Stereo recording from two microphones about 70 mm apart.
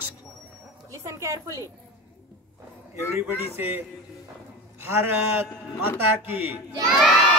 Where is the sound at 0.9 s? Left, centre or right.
Right.